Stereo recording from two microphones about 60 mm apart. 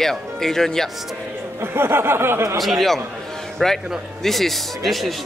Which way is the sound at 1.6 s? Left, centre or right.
Right.